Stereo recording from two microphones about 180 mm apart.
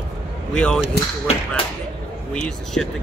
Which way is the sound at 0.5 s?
5° left (ahead or behind).